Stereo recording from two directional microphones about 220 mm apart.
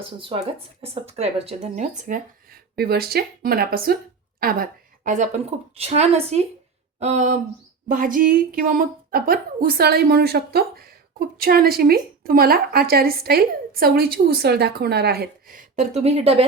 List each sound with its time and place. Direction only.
0.0 s a woman's voice: 25° right (ahead or behind)